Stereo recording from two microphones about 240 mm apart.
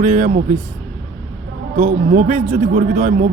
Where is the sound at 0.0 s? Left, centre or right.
Right.